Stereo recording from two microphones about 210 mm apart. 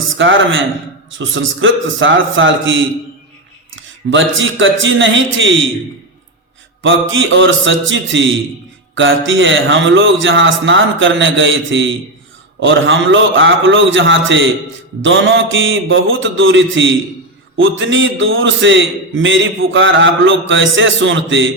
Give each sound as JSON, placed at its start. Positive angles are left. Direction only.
{"t": 0.2, "sound": "a man's voice", "side_deg": -65}
{"t": 3.8, "sound": "a man's voice", "side_deg": -65}
{"t": 6.8, "sound": "a man's voice", "side_deg": -70}